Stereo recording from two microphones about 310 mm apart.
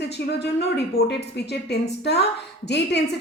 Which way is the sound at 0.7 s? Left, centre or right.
Left.